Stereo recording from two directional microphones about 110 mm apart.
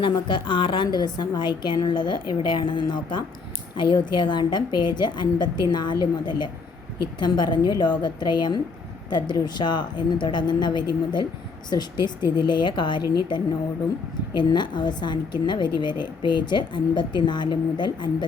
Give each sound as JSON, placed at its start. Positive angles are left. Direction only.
{"t": 0.0, "sound": "a woman's voice", "side_deg": 45}